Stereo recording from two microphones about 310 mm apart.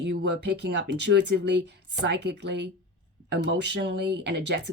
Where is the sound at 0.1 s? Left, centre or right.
Right.